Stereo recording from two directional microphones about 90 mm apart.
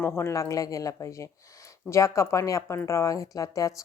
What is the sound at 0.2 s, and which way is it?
Speech, 30° left (ahead or behind).